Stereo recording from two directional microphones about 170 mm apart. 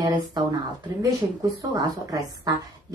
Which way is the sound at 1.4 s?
20° right (ahead or behind).